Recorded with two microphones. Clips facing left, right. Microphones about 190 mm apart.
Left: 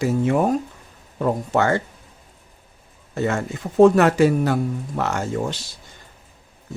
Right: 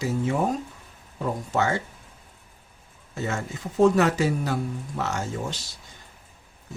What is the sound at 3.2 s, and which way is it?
Speech, 60° left (ahead or behind).